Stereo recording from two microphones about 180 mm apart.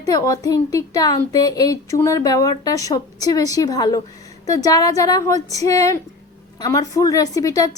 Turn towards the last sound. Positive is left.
turn(degrees=20)  # may be behind; listen again after turning